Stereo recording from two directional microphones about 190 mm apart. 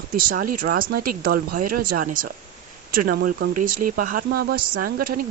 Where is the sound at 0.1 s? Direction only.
45° right (ahead or behind).